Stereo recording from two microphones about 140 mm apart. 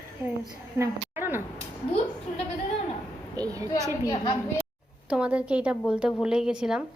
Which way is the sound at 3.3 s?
25° right (ahead or behind).